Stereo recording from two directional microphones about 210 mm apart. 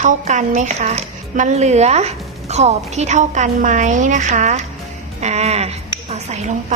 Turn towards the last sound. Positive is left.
turn(degrees=-30)  # may be behind; listen again after turning